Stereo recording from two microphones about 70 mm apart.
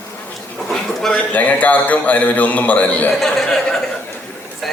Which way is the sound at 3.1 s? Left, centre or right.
Centre.